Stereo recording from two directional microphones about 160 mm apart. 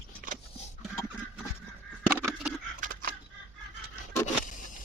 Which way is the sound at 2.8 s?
60° right (ahead or behind).